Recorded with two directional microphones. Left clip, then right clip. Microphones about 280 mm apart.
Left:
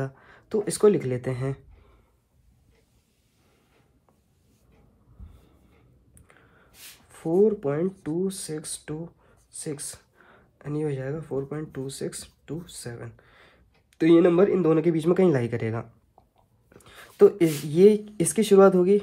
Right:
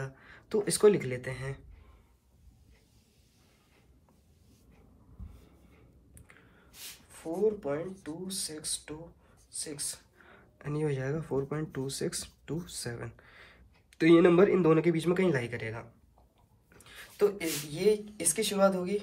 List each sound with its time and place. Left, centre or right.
0.0 s speech: centre
6.1 s a sound: centre
7.1 s speech: left
10.1 s speech: centre; by 18.9 s left